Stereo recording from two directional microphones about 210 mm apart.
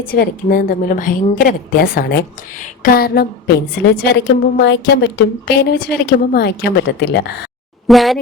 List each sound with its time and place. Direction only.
0.0 s a woman's voice: 45° left (ahead or behind)
7.9 s speech: centre (ahead or behind)